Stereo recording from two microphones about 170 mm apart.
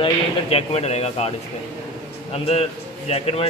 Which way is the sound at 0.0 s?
35° left (ahead or behind).